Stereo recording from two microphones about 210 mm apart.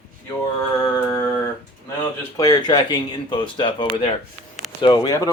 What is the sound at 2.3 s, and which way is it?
A man's voice, 20° left (ahead or behind).